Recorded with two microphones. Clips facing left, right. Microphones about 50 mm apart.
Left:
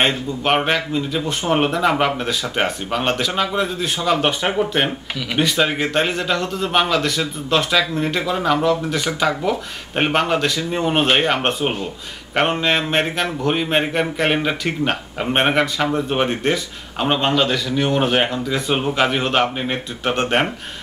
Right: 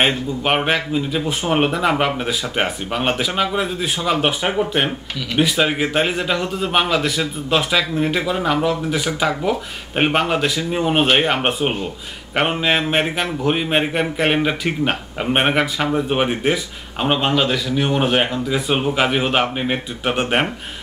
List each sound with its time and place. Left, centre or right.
0.0 s a man's voice: centre